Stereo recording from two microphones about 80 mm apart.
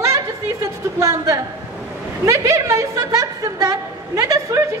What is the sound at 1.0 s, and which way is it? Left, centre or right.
A woman's voice, right.